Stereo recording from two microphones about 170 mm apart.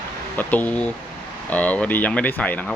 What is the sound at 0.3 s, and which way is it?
Speech, 10° left (ahead or behind).